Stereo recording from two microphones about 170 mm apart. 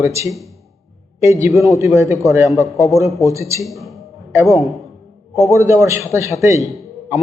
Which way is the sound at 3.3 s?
15° right (ahead or behind).